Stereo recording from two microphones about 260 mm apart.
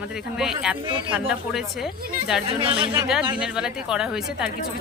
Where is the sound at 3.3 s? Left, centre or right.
Centre.